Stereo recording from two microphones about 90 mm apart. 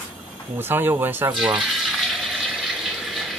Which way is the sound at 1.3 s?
5° right (ahead or behind).